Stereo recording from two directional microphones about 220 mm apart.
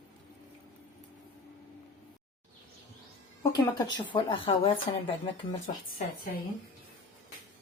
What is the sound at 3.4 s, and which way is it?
A woman's voice, 15° left (ahead or behind).